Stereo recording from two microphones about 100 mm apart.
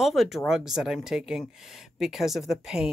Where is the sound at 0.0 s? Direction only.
Centre (ahead or behind).